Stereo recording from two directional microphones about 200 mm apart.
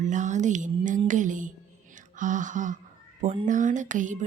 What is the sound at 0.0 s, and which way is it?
Music, 40° right (ahead or behind).